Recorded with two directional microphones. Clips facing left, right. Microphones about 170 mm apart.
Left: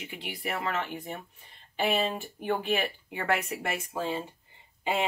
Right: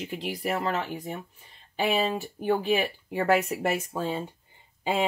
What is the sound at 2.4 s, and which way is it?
Speech, 40° right (ahead or behind).